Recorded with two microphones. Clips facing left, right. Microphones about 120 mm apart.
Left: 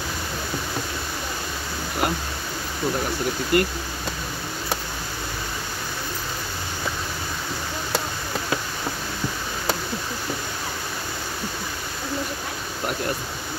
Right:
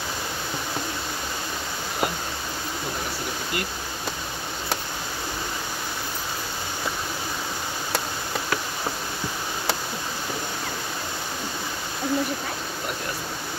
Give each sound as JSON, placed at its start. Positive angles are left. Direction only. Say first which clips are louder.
{"t": 3.5, "sound": "speech", "louder": "left 11 dB", "side_deg": 55}